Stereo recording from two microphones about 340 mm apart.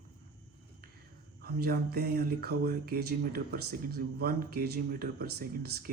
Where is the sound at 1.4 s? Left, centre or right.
Right.